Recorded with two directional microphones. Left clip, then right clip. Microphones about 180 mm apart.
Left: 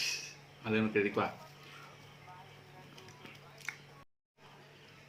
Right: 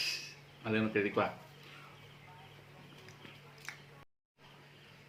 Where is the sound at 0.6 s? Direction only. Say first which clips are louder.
Left 1 dB; 5° left (ahead or behind).